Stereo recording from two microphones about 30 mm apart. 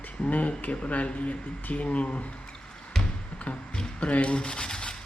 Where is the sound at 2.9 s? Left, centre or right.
Centre.